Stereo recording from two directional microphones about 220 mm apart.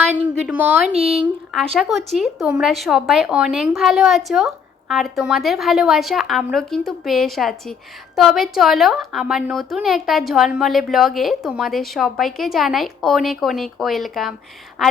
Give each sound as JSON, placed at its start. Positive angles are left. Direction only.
{"t": 0.4, "sound": "speech", "side_deg": -5}